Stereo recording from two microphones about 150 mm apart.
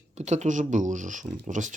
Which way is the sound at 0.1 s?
50° right (ahead or behind).